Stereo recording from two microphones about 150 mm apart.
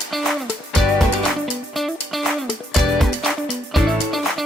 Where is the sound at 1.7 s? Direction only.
Centre (ahead or behind).